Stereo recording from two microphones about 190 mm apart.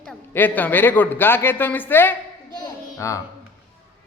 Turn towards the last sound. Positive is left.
turn(degrees=15)  # may be behind; listen again after turning